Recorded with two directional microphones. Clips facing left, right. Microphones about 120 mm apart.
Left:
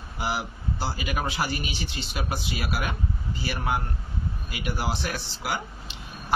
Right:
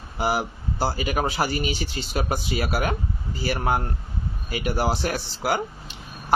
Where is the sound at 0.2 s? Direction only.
45° right (ahead or behind).